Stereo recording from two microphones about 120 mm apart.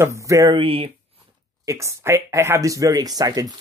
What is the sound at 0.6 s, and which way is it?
Speech, 50° right (ahead or behind).